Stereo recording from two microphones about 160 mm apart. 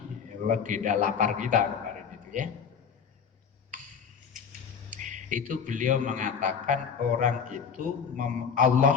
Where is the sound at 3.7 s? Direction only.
55° right (ahead or behind).